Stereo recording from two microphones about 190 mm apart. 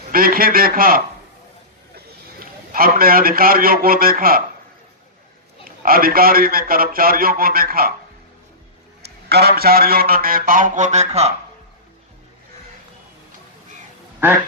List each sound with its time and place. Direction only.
0.1 s a man's voice: 50° right (ahead or behind)
2.4 s a man's voice: 50° right (ahead or behind)
5.6 s a man's voice: 50° right (ahead or behind)
9.0 s a man's voice: 55° right (ahead or behind); by 11.3 s 35° right (ahead or behind)